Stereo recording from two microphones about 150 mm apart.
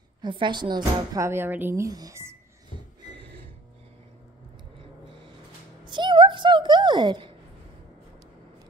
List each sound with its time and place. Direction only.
0.2 s speech: 30° right (ahead or behind)
5.9 s speech: 30° right (ahead or behind)